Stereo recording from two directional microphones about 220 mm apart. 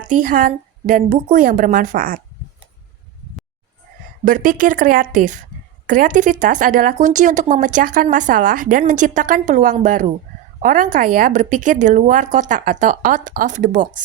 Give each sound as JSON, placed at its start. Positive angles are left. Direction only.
{"t": 0.2, "sound": "speech", "side_deg": -40}
{"t": 4.3, "sound": "speech", "side_deg": -35}